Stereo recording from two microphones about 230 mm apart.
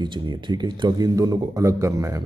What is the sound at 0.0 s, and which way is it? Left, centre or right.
A man's voice, centre.